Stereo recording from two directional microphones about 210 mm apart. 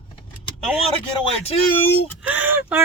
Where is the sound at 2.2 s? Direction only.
10° right (ahead or behind).